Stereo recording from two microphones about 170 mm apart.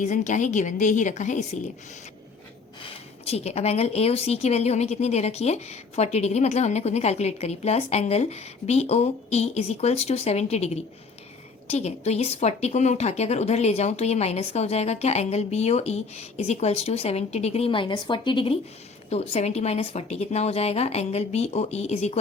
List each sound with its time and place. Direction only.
0.0 s a woman's voice: 45° left (ahead or behind)
3.2 s a woman's voice: 40° left (ahead or behind)